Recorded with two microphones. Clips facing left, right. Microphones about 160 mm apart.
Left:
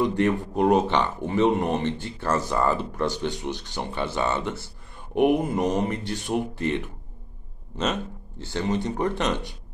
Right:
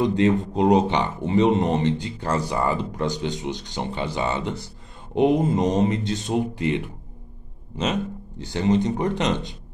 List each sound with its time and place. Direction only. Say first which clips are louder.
0.0 s speech: right 3 dB; 20° right (ahead or behind)